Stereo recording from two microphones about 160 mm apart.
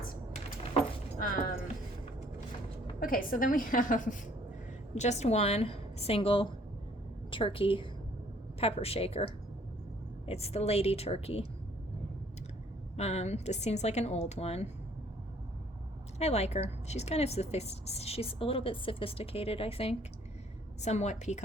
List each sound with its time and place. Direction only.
3.0 s a woman's voice: 60° left (ahead or behind); by 11.4 s 40° left (ahead or behind)
13.0 s a woman's voice: 45° left (ahead or behind)
16.1 s a woman's voice: 40° left (ahead or behind)